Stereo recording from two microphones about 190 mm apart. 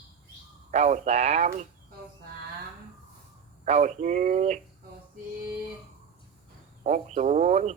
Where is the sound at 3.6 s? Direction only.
40° right (ahead or behind).